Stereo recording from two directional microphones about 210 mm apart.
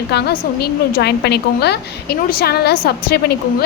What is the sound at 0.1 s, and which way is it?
A woman's voice, 50° left (ahead or behind).